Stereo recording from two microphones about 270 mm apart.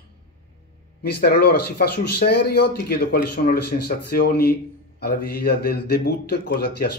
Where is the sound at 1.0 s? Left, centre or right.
Left.